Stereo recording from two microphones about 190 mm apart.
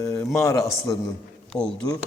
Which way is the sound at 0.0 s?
15° left (ahead or behind).